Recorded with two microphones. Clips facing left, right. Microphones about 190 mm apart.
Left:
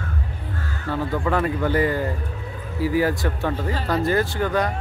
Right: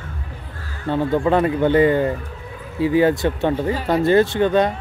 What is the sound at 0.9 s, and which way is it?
Speech, 25° right (ahead or behind).